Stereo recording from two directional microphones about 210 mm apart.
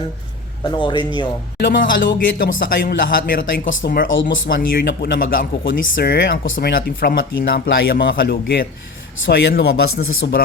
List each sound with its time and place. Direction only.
0.7 s speech: 20° left (ahead or behind)
1.5 s speech: 55° left (ahead or behind)
3.7 s speech: 65° left (ahead or behind)
4.4 s speech: 45° left (ahead or behind)
9.1 s speech: 60° left (ahead or behind)